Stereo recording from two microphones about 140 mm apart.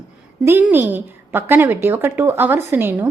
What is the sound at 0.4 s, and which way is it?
A woman's voice, 15° right (ahead or behind).